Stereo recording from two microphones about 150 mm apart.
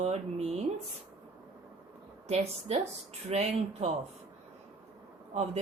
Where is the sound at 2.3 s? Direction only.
45° right (ahead or behind).